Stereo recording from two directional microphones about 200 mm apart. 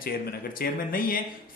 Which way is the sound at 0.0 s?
45° left (ahead or behind).